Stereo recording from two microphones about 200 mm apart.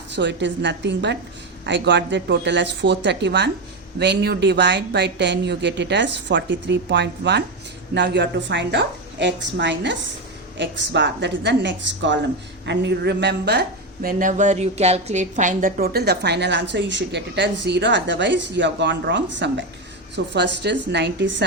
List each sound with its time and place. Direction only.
0.2 s speech: 60° right (ahead or behind)